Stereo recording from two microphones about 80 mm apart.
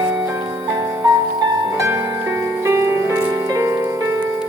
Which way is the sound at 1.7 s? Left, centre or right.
Right.